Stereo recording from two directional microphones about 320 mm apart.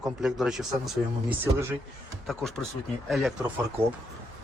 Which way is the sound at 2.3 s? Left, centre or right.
Centre.